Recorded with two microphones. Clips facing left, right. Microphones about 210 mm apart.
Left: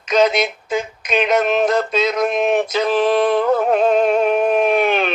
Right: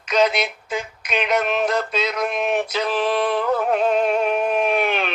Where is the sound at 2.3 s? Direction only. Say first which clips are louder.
Left 5 dB; 25° left (ahead or behind).